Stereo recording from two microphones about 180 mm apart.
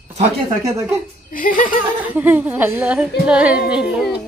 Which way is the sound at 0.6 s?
15° right (ahead or behind).